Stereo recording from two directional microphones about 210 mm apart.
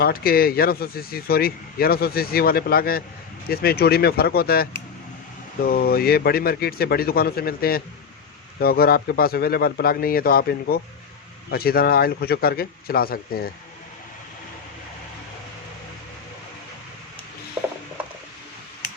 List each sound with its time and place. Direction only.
0.0 s speech: 45° left (ahead or behind)